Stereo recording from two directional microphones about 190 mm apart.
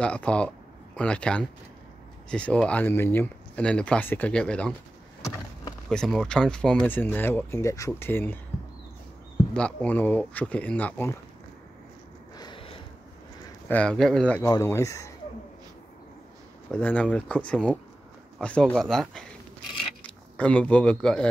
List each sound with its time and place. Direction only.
0.0 s speech: 5° left (ahead or behind)
5.9 s speech: 5° left (ahead or behind)
9.5 s speech: 5° left (ahead or behind)
12.4 s a sound: 25° left (ahead or behind)
13.7 s speech: 5° left (ahead or behind)
14.4 s speech: 15° left (ahead or behind)
16.7 s speech: 5° left (ahead or behind)